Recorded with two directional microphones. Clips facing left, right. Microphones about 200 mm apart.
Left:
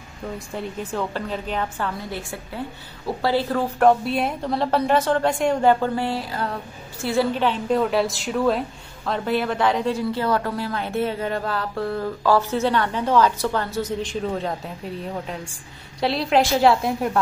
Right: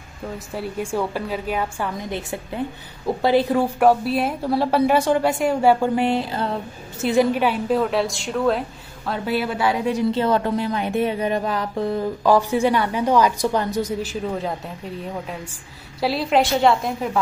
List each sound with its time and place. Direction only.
0.6 s a woman's voice: 10° right (ahead or behind)
4.0 s a woman's voice: centre (ahead or behind)
7.8 s a woman's voice: centre (ahead or behind)
16.0 s a woman's voice: centre (ahead or behind)